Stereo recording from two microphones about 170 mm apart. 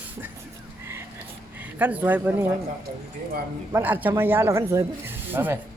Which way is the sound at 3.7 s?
10° right (ahead or behind).